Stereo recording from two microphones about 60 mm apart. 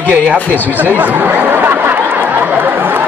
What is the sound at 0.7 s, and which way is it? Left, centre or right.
Chatter, right.